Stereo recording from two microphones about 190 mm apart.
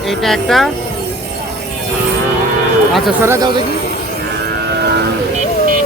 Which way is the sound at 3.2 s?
20° right (ahead or behind).